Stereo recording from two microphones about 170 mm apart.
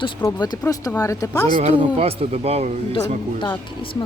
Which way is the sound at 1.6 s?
35° right (ahead or behind).